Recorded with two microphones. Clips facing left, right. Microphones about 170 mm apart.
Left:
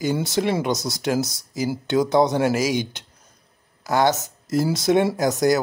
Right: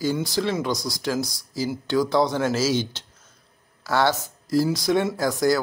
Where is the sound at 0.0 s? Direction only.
20° left (ahead or behind).